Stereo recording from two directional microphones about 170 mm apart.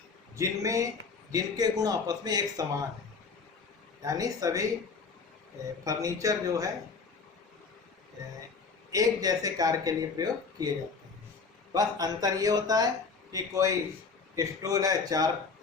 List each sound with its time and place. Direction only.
0.3 s speech: 20° right (ahead or behind)
4.0 s speech: 20° right (ahead or behind)
5.8 s speech: 20° right (ahead or behind)
8.9 s speech: 20° right (ahead or behind)
11.7 s speech: 20° right (ahead or behind)